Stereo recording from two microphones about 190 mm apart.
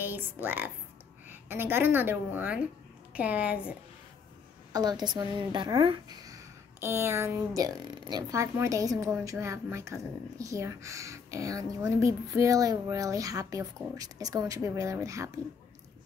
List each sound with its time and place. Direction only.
0.0 s a woman's voice: 10° right (ahead or behind)
4.7 s a woman's voice: 20° right (ahead or behind)